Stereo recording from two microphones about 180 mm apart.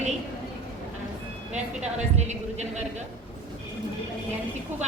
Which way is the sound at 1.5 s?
40° right (ahead or behind).